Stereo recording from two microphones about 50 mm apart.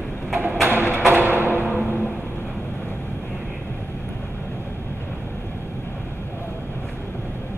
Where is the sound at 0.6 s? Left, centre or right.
Right.